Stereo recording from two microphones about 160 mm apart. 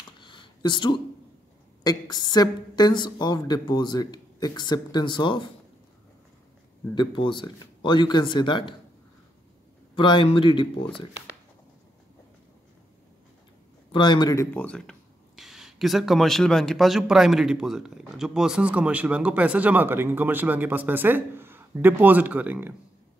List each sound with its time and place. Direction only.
0.2 s a sound: 30° left (ahead or behind)
1.8 s a woman's voice: 25° left (ahead or behind)
7.0 s a woman's voice: 30° left (ahead or behind)
9.9 s speech: 30° left (ahead or behind)
13.9 s speech: 30° left (ahead or behind); by 22.8 s 10° right (ahead or behind)